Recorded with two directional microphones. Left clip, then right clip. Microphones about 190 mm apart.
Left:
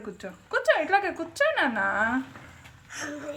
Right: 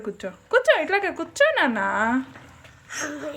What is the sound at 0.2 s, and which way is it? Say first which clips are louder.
Speech: right 8 dB; 30° right (ahead or behind).